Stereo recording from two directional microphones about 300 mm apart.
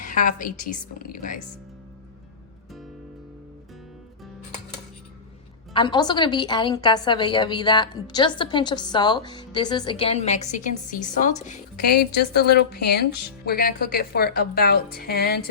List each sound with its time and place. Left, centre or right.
0.0 s a woman's voice: left
5.7 s a woman's voice: centre; by 15.4 s left